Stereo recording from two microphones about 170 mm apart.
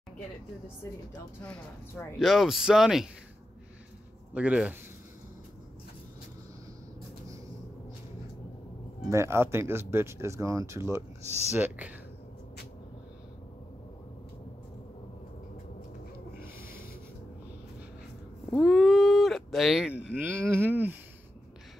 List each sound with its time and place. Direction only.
2.1 s speech: centre (ahead or behind)
4.3 s speech: 10° right (ahead or behind)
9.1 s speech: 15° right (ahead or behind)
18.5 s a sound: centre (ahead or behind)
19.9 s speech: 90° left
20.2 s speech: 10° right (ahead or behind)